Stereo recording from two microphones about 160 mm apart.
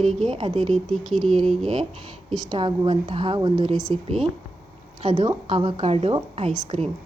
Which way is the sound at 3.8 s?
Centre (ahead or behind).